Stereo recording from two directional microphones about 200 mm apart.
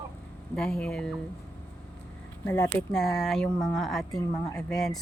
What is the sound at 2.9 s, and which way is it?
A woman's voice, centre (ahead or behind).